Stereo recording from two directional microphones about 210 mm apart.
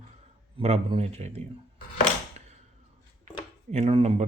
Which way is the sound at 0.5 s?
25° right (ahead or behind).